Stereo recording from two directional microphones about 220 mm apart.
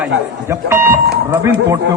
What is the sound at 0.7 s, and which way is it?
Speech, 10° right (ahead or behind).